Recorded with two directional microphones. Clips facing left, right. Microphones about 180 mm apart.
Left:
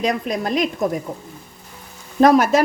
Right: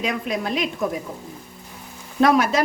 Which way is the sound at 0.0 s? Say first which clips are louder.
Left 3 dB; 40° left (ahead or behind).